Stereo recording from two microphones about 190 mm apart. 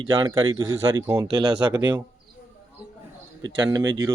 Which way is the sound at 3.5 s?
20° right (ahead or behind).